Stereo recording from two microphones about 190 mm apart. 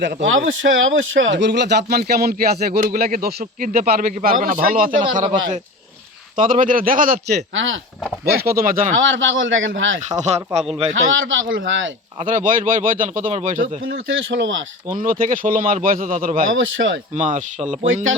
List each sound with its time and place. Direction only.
0.0 s speech: 70° right (ahead or behind); by 5.3 s 40° right (ahead or behind)
6.3 s speech: 45° right (ahead or behind)
7.5 s speech: 90° right
8.2 s speech: 55° right (ahead or behind)
8.9 s a man's voice: 80° right
10.2 s speech: 35° right (ahead or behind)
10.9 s a man's voice: 90° right
12.2 s speech: 45° right (ahead or behind)
13.9 s a man's voice: 80° right
14.9 s speech: 45° right (ahead or behind)
16.5 s a man's voice: 90° right
17.2 s speech: 40° right (ahead or behind)
17.8 s speech: 90° right